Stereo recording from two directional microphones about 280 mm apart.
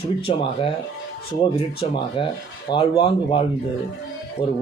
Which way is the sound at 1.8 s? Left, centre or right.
Left.